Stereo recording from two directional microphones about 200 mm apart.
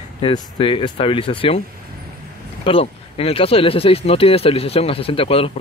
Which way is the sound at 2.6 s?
30° left (ahead or behind).